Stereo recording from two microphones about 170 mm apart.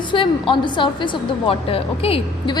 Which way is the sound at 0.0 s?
30° left (ahead or behind).